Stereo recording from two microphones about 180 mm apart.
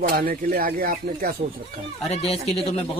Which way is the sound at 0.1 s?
55° right (ahead or behind).